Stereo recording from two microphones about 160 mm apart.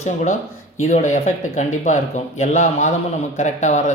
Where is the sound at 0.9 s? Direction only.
50° left (ahead or behind).